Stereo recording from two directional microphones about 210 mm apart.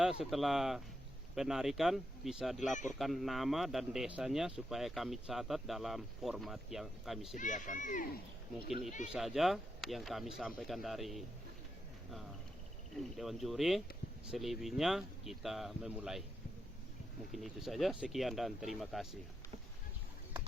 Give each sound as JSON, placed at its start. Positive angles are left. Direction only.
{"t": 0.0, "sound": "speech", "side_deg": 0}
{"t": 7.3, "sound": "a child's voice", "side_deg": 35}
{"t": 8.5, "sound": "speech", "side_deg": 0}
{"t": 13.0, "sound": "speech", "side_deg": 0}
{"t": 17.3, "sound": "speech", "side_deg": 0}